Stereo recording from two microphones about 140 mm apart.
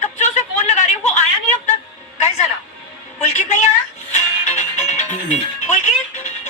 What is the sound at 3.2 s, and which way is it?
Music, 55° left (ahead or behind).